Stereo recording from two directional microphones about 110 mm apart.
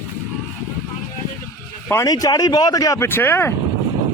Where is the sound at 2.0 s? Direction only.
35° left (ahead or behind).